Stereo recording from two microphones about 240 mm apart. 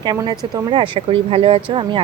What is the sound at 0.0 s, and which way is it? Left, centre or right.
Speech, centre.